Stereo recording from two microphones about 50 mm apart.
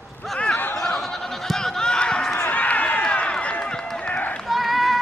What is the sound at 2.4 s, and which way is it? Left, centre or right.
Run, left.